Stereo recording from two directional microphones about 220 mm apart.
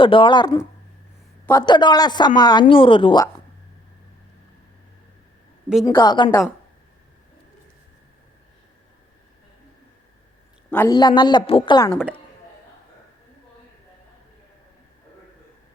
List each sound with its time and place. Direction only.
0.0 s speech: 25° left (ahead or behind)
5.8 s speech: 20° left (ahead or behind)
10.7 s a man's voice: 10° left (ahead or behind)
10.9 s speech: 20° left (ahead or behind)